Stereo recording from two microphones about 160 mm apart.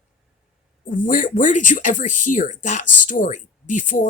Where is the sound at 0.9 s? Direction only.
55° left (ahead or behind).